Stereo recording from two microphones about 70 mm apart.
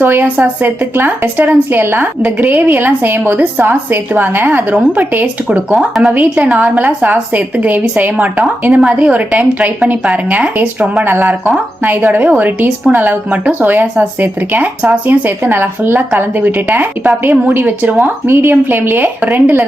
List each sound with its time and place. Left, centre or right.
0.0 s a woman's voice: right
11.0 s a woman's voice: right